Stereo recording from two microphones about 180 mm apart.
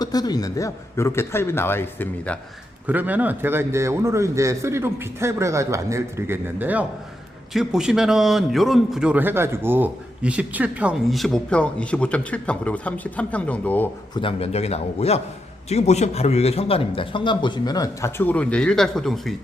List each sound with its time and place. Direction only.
0.0 s a man's voice: 20° left (ahead or behind)
2.8 s a man's voice: 10° right (ahead or behind); by 13.9 s 10° left (ahead or behind)
14.2 s a man's voice: 30° left (ahead or behind); by 19.3 s centre (ahead or behind)